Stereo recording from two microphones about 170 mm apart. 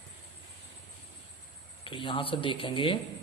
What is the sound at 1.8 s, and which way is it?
Speech, 30° left (ahead or behind).